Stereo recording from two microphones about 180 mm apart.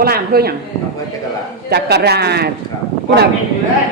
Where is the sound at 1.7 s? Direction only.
65° right (ahead or behind).